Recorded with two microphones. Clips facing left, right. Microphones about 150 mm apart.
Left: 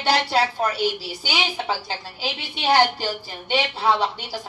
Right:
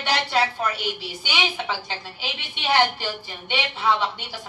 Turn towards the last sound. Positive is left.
turn(degrees=35)  # may be behind; listen again after turning